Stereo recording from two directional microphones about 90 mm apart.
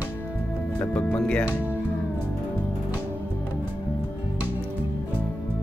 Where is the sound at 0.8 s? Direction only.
15° left (ahead or behind).